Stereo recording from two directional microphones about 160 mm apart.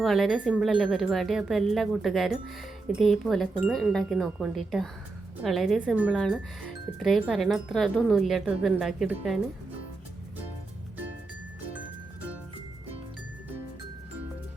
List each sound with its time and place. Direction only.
0.0 s speech: centre (ahead or behind)